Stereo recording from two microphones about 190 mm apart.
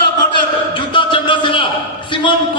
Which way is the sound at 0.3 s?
25° left (ahead or behind).